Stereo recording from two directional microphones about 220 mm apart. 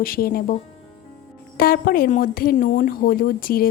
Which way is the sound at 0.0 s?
40° left (ahead or behind).